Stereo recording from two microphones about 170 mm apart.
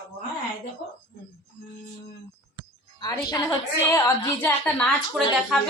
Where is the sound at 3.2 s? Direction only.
25° left (ahead or behind).